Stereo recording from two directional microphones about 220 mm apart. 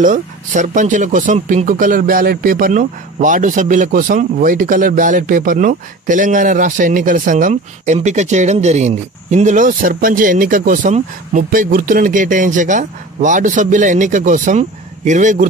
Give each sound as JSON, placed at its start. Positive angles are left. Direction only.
{"t": 0.0, "sound": "speech", "side_deg": -35}